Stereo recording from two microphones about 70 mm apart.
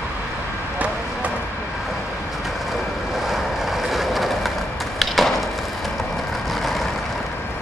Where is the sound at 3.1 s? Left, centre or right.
Centre.